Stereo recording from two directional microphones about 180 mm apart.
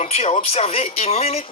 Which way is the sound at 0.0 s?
35° left (ahead or behind).